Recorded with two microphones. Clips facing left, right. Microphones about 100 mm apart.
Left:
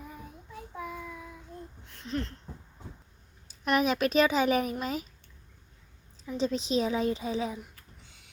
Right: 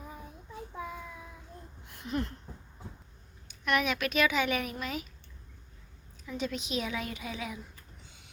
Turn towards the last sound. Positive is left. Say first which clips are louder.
# left 8 dB
turn(degrees=35)  # may be behind; listen again after turning